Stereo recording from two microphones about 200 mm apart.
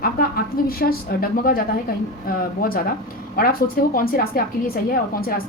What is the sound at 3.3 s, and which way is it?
A woman's voice, 45° left (ahead or behind).